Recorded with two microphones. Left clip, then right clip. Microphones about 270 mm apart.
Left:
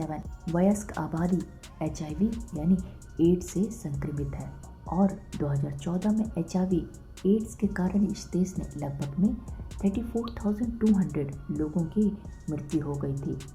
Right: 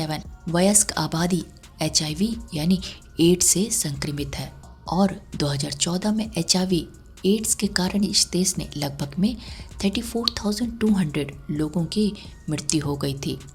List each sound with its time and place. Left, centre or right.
0.5 s speech: right